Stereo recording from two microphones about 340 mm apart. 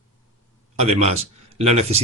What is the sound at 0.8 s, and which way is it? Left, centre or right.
A man's voice, centre.